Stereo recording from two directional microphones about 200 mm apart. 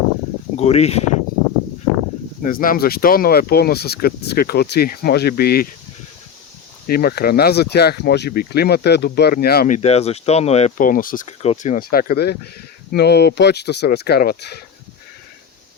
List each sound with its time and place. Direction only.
0.5 s speech: 30° left (ahead or behind)
2.4 s speech: 45° left (ahead or behind)
6.8 s speech: 50° left (ahead or behind)